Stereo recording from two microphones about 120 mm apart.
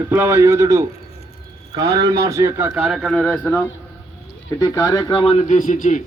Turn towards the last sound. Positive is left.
turn(degrees=90)